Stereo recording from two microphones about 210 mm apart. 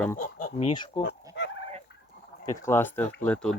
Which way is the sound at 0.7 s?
20° left (ahead or behind).